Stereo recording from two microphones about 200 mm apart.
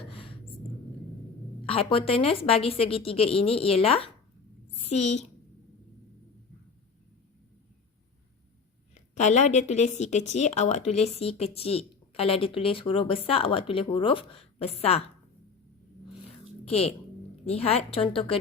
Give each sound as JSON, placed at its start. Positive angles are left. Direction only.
{"t": 0.1, "sound": "a sound", "side_deg": 25}
{"t": 1.6, "sound": "a woman's voice", "side_deg": 25}
{"t": 9.0, "sound": "a woman's voice", "side_deg": 35}
{"t": 16.6, "sound": "a woman's voice", "side_deg": 30}